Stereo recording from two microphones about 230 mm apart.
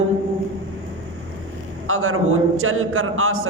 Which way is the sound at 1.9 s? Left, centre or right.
Right.